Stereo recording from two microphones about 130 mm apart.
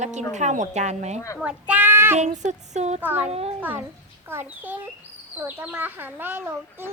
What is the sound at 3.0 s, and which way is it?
Speech, 15° right (ahead or behind).